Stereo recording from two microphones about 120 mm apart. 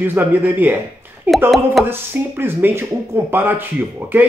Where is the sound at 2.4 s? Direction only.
20° right (ahead or behind).